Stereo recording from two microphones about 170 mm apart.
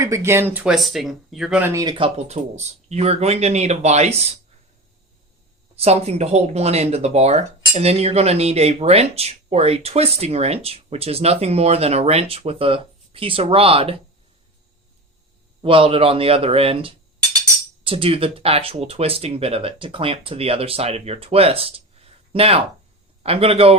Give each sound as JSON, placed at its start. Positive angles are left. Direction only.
{"t": 0.0, "sound": "speech", "side_deg": -15}
{"t": 1.7, "sound": "speech", "side_deg": -25}
{"t": 2.1, "sound": "speech", "side_deg": -40}
{"t": 5.7, "sound": "speech", "side_deg": -40}
{"t": 15.6, "sound": "speech", "side_deg": -35}